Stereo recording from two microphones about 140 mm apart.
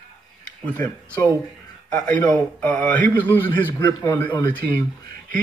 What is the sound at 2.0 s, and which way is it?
A man's voice, 10° left (ahead or behind).